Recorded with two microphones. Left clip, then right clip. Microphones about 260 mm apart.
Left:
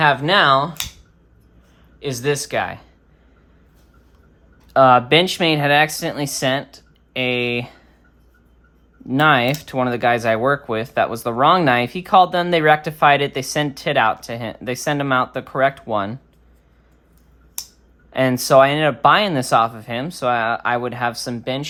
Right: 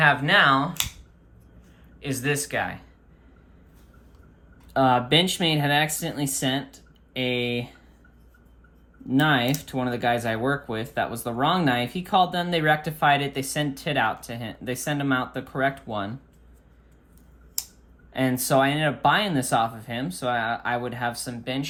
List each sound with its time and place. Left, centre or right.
0.0 s speech: centre
2.0 s speech: centre
4.7 s speech: left
9.0 s speech: left
18.1 s speech: left